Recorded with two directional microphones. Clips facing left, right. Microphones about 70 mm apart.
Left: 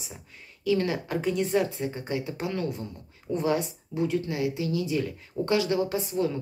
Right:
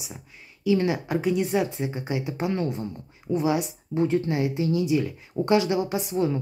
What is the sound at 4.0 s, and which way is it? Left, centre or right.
Speech, right.